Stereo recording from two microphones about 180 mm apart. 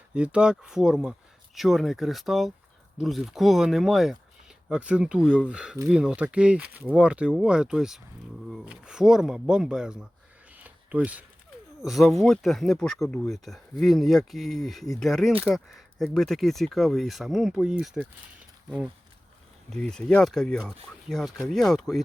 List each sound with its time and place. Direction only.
0.1 s speech: 5° right (ahead or behind)
10.6 s a sound: 10° right (ahead or behind)
11.8 s speech: centre (ahead or behind)
19.7 s speech: 5° left (ahead or behind)